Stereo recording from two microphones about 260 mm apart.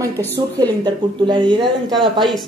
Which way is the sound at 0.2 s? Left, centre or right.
Centre.